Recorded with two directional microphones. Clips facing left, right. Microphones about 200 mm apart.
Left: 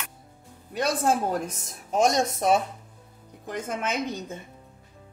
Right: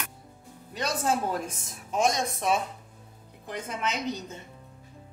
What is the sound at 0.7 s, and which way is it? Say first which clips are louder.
Music: left 4 dB; 55° left (ahead or behind).